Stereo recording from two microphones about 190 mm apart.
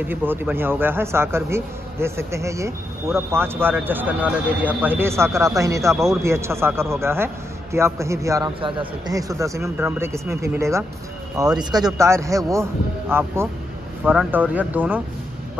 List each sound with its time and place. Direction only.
0.0 s speech: 10° right (ahead or behind)